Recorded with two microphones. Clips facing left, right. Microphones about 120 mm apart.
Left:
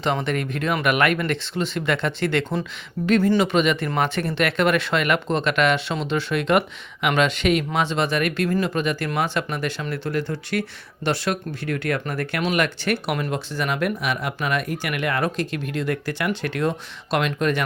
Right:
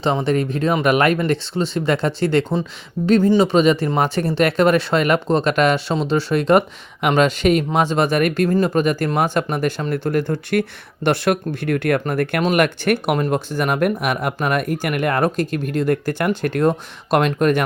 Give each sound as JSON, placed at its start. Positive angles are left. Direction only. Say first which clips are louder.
{"t": 0.3, "sound": "speech", "louder": "right 6 dB", "side_deg": -35}
{"t": 3.4, "sound": "speech", "louder": "right 5 dB", "side_deg": -35}